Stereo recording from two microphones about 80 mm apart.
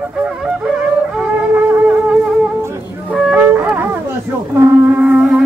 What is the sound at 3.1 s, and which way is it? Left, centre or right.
Wind instrument, centre.